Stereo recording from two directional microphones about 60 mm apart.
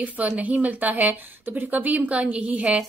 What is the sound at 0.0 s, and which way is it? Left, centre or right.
Speech, right.